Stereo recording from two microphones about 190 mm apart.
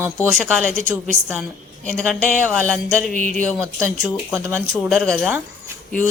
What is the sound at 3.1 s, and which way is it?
Speech, 40° right (ahead or behind).